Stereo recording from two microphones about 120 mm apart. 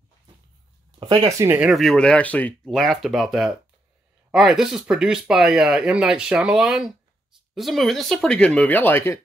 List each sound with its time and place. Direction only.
0.9 s speech: 40° right (ahead or behind)
1.4 s speech: 15° right (ahead or behind)
1.7 s speech: centre (ahead or behind)
2.7 s speech: centre (ahead or behind); by 9.2 s 20° left (ahead or behind)